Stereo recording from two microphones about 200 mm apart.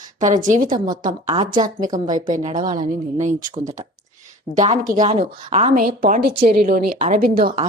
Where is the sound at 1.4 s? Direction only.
25° right (ahead or behind).